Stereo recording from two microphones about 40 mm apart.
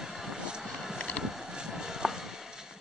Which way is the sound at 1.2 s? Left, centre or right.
Centre.